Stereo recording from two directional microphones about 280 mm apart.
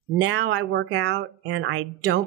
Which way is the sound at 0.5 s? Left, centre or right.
Right.